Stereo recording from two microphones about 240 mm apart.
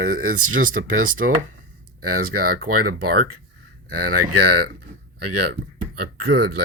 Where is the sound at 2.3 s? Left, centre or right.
Right.